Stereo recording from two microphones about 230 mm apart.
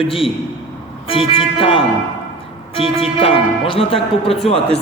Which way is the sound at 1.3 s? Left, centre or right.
Left.